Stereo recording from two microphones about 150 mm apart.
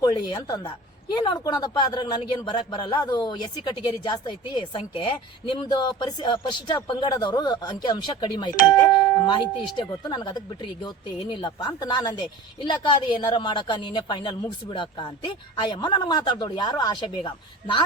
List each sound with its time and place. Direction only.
0.0 s a man's voice: 25° left (ahead or behind)